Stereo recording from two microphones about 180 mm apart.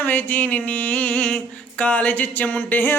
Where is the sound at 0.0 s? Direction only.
10° left (ahead or behind).